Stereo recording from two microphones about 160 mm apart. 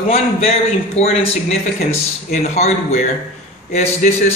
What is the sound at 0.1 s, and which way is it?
A man's voice, 40° left (ahead or behind).